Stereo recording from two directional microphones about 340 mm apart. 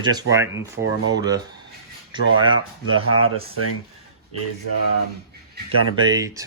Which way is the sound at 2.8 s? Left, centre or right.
Right.